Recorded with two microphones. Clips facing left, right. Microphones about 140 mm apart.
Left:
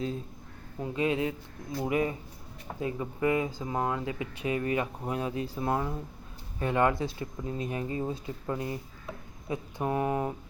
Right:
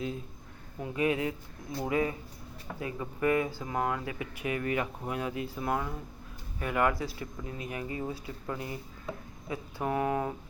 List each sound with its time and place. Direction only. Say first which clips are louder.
0.8 s speech: left 1 dB; 25° left (ahead or behind)